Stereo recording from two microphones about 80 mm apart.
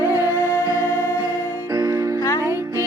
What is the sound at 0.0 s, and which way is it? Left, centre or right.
Music, right.